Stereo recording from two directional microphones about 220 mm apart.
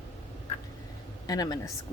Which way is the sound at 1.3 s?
15° left (ahead or behind).